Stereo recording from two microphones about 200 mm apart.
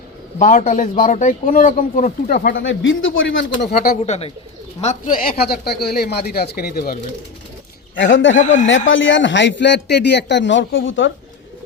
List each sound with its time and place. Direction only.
0.3 s a man's voice: 40° left (ahead or behind)
2.6 s speech: 75° left (ahead or behind)
3.7 s a man's voice: 40° left (ahead or behind)
7.9 s a man's voice: 70° left (ahead or behind)